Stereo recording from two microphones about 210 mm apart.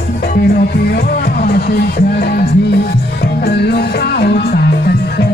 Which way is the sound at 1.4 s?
50° left (ahead or behind).